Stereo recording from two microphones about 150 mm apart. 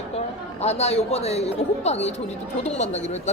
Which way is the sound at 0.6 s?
45° left (ahead or behind).